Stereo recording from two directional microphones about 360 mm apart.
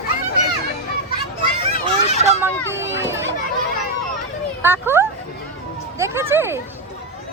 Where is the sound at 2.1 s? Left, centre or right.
Centre.